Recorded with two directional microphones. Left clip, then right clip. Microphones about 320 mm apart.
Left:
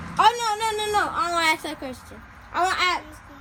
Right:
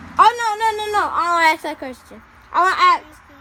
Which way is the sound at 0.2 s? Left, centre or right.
Right.